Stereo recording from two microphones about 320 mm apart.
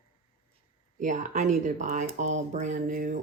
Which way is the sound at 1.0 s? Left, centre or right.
Right.